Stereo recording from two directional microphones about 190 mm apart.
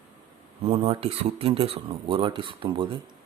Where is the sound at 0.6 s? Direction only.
30° right (ahead or behind).